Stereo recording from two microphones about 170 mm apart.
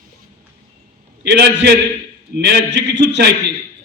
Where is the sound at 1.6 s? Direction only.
80° right.